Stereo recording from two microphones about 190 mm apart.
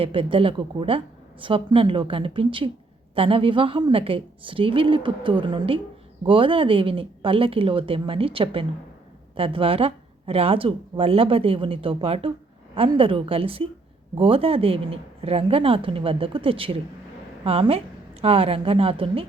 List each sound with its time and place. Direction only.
0.0 s a woman's voice: 30° right (ahead or behind)